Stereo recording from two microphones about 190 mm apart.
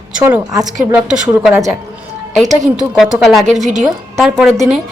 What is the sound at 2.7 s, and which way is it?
A woman's voice, centre (ahead or behind).